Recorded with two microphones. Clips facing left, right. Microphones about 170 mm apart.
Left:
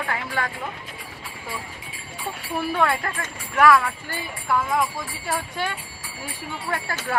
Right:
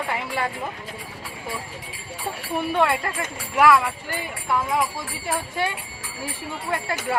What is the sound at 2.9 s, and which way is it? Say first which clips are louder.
Speech: right 1 dB; 20° right (ahead or behind).